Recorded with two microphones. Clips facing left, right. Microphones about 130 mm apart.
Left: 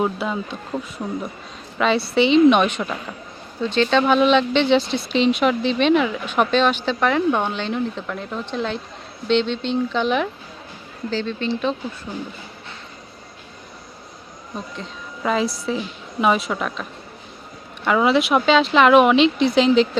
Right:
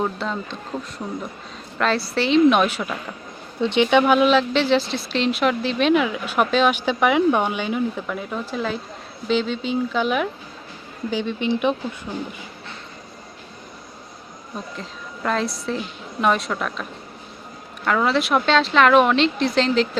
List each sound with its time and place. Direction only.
0.0 s speech: 10° left (ahead or behind); by 12.2 s 10° right (ahead or behind)
14.8 s a woman's voice: 5° left (ahead or behind)
17.8 s speech: 5° left (ahead or behind)